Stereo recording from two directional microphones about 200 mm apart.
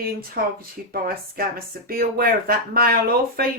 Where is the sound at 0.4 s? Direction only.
50° right (ahead or behind).